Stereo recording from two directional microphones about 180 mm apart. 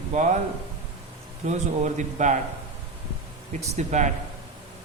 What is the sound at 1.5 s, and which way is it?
Speech, 40° right (ahead or behind).